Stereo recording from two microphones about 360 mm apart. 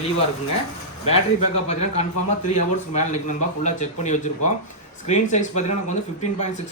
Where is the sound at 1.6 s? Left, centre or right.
Centre.